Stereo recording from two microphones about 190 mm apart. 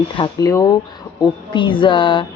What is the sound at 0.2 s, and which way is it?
A woman's voice, 20° left (ahead or behind).